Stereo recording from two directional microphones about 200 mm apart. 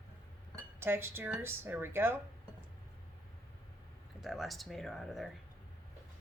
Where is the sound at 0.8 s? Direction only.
10° right (ahead or behind).